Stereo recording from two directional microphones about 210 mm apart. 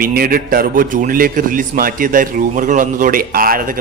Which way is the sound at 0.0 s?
45° right (ahead or behind).